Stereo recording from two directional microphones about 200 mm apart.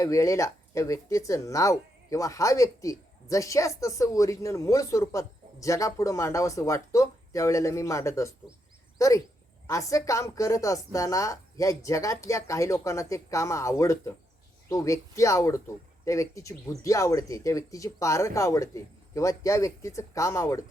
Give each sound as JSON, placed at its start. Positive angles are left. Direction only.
{"t": 0.0, "sound": "speech", "side_deg": 15}